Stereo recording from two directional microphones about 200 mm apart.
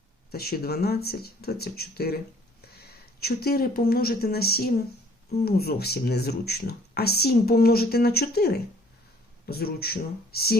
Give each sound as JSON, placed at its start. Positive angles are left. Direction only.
{"t": 0.3, "sound": "speech", "side_deg": 50}
{"t": 3.2, "sound": "speech", "side_deg": 50}